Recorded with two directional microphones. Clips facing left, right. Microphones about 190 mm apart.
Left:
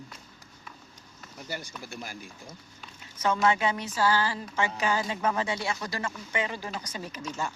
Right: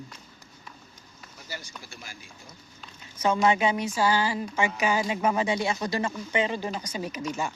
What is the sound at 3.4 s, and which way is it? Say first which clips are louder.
Speech: right 3 dB; 15° right (ahead or behind).